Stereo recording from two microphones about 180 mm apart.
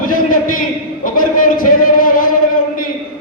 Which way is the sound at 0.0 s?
50° left (ahead or behind).